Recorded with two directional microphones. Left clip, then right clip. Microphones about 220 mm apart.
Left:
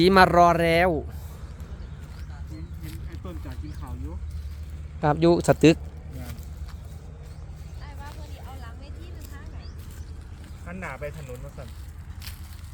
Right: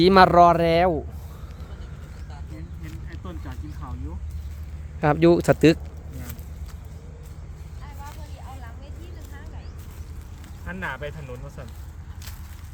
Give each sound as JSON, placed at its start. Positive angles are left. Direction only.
{"t": 0.0, "sound": "speech", "side_deg": -5}
{"t": 4.9, "sound": "speech", "side_deg": -5}
{"t": 10.7, "sound": "a sound", "side_deg": -45}